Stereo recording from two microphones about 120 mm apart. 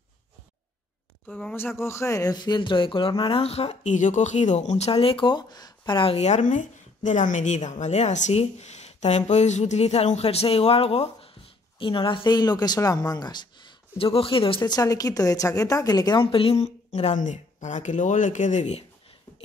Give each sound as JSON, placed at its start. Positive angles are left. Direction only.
{"t": 1.2, "sound": "speech", "side_deg": 15}
{"t": 6.1, "sound": "speech", "side_deg": 70}
{"t": 11.8, "sound": "speech", "side_deg": 45}
{"t": 14.6, "sound": "speech", "side_deg": 35}
{"t": 16.6, "sound": "speech", "side_deg": 65}